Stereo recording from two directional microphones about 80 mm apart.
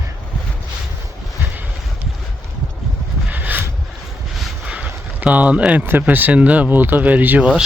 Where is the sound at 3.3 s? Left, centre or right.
Right.